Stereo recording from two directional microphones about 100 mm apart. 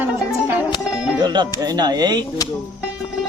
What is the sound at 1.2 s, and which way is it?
Speech, 45° right (ahead or behind).